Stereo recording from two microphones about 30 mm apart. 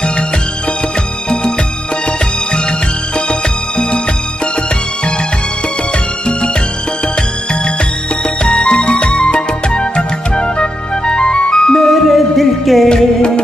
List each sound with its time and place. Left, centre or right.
3.3 s music: left
8.5 s music: left
8.8 s music: left
11.8 s music: centre
12.8 s music: left